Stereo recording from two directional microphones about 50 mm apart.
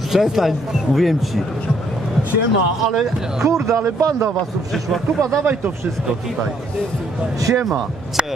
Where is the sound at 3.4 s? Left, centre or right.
Right.